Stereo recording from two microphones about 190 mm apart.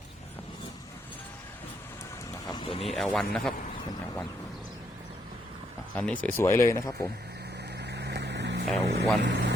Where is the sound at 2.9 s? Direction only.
Centre (ahead or behind).